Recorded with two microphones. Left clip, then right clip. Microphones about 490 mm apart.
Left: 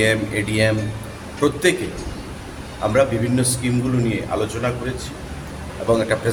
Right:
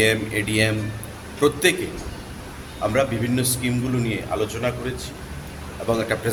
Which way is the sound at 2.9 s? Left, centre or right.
Right.